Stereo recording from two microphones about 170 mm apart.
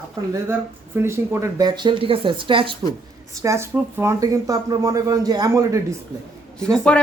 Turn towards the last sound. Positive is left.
turn(degrees=5)  # may be behind; listen again after turning